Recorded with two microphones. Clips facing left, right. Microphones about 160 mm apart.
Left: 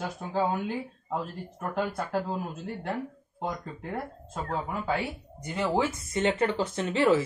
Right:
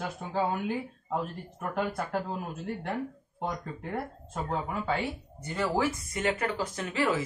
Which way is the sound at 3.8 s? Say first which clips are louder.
Even; centre (ahead or behind).